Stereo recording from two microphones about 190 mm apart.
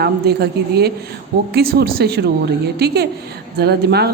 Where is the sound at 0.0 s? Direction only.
60° right (ahead or behind).